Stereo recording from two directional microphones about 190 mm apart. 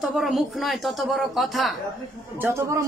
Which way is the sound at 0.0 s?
Centre (ahead or behind).